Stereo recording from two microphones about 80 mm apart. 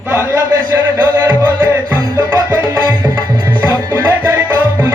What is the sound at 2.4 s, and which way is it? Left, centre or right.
Music, right.